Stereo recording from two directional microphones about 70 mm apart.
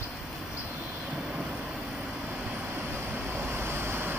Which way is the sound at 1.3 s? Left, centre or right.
Centre.